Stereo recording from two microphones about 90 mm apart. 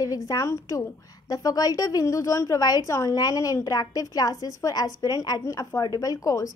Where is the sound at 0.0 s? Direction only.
40° left (ahead or behind).